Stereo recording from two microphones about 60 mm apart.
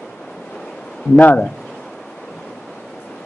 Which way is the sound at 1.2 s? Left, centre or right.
Left.